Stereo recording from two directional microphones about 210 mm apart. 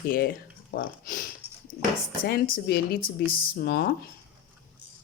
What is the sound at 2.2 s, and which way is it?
Speech, 45° left (ahead or behind).